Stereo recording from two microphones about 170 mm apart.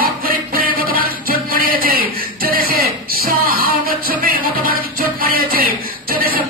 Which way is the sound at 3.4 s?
60° right (ahead or behind).